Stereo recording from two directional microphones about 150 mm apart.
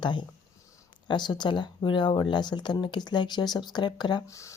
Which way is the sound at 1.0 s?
30° left (ahead or behind).